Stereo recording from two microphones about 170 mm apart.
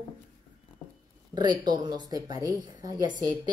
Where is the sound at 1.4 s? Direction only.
25° right (ahead or behind).